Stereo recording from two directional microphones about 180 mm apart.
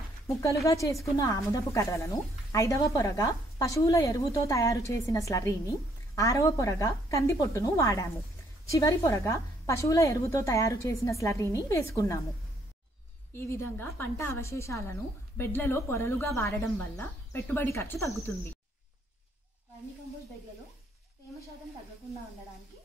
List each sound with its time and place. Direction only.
0.3 s a woman's voice: 15° left (ahead or behind)
13.3 s speech: 15° left (ahead or behind)